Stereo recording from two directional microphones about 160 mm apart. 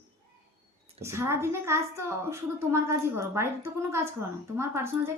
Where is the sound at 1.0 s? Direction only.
15° right (ahead or behind).